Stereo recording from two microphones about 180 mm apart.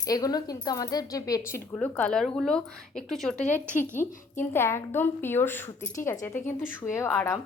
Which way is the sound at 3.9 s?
15° left (ahead or behind).